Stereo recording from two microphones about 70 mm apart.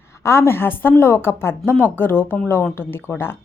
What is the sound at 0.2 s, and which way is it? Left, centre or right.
Speech, left.